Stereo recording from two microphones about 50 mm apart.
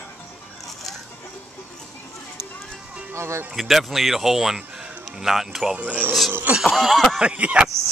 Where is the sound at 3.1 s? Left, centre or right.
Right.